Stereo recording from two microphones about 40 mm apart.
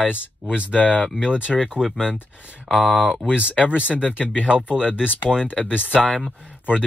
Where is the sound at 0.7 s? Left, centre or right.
Left.